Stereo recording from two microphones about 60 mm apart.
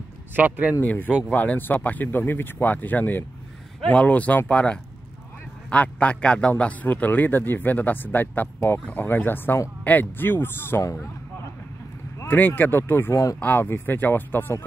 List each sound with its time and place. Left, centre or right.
0.3 s speech: right
0.7 s speech: left
3.9 s a man's voice: left
12.3 s speech: left
13.1 s speech: left
13.4 s speech: left